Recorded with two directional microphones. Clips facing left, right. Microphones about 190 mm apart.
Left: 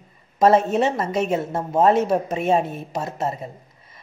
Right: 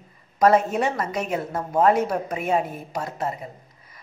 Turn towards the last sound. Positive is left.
turn(degrees=25)  # may be behind; listen again after turning